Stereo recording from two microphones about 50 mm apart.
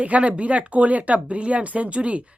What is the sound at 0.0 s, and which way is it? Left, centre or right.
Speech, right.